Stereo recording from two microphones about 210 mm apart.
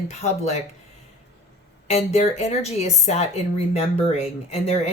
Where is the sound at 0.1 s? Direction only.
30° left (ahead or behind).